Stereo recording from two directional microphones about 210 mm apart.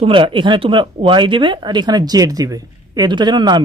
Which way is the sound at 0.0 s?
25° right (ahead or behind).